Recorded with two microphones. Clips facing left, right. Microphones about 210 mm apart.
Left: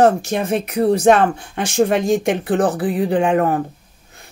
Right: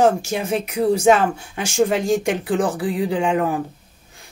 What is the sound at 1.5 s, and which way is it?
Speech, 60° left (ahead or behind).